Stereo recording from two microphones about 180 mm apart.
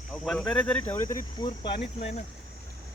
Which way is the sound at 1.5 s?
30° left (ahead or behind).